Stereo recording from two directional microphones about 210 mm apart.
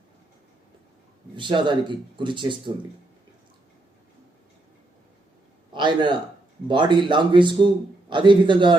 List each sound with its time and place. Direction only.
1.4 s speech: 25° right (ahead or behind)
5.7 s a man's voice: 20° right (ahead or behind)